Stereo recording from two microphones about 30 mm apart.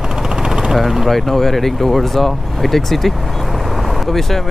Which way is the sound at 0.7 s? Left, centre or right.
Centre.